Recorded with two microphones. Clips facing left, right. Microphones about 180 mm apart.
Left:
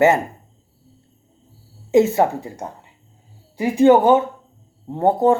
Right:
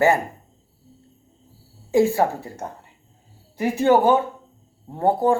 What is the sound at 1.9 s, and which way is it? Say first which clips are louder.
Speech: left 3 dB; 20° left (ahead or behind).